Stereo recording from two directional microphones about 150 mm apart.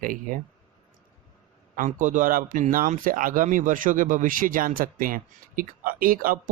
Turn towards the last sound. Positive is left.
turn(degrees=-70)  # may be behind; listen again after turning